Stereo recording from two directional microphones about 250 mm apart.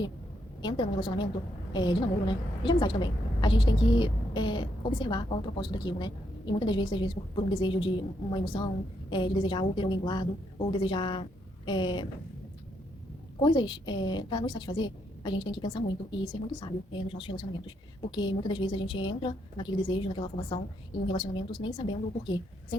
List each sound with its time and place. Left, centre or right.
0.6 s a woman's voice: centre
13.4 s a woman's voice: centre